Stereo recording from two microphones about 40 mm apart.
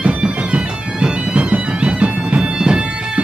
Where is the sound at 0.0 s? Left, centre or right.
Right.